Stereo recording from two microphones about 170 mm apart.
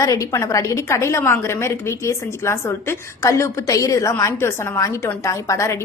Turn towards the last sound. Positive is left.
turn(degrees=15)  # may be behind; listen again after turning